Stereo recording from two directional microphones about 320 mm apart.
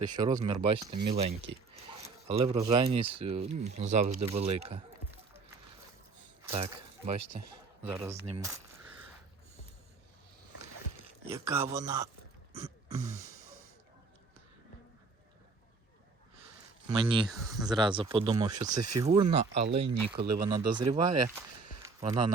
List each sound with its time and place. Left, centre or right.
0.1 s speech: centre
6.5 s speech: centre
11.3 s speech: centre
16.8 s speech: centre
21.8 s a sound: centre